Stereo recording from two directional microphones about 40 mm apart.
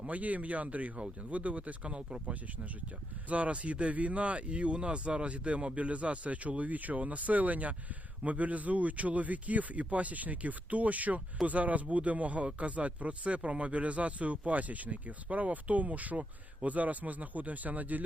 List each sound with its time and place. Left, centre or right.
0.1 s speech: right
3.2 s speech: right